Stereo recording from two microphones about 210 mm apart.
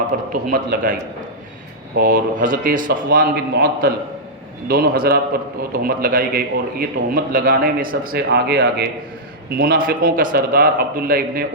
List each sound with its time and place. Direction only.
0.1 s a man's voice: 40° right (ahead or behind)
2.0 s a man's voice: 40° right (ahead or behind)